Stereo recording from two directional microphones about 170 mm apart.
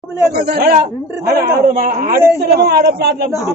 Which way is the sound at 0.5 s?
60° right (ahead or behind).